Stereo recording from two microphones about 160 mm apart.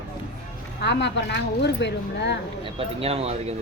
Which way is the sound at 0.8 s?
90° left.